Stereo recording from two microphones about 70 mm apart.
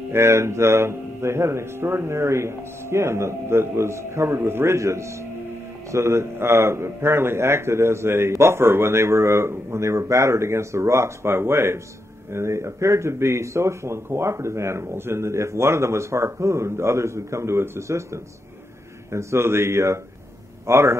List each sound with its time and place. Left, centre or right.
0.1 s a man's voice: right